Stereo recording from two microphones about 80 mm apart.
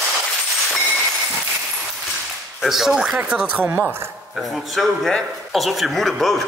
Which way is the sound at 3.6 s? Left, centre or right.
Right.